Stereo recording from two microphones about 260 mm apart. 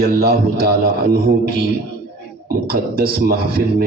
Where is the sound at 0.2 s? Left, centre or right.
Right.